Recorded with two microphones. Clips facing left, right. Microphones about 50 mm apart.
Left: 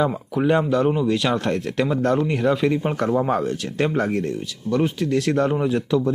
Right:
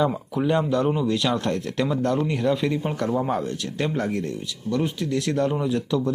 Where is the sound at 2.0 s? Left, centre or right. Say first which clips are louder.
Left 3 dB; left.